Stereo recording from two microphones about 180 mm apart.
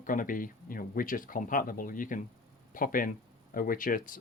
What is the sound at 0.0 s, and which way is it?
Speech, 50° left (ahead or behind).